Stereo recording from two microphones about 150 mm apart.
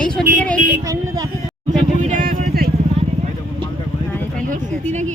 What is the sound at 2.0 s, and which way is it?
Vehicle, 65° right (ahead or behind).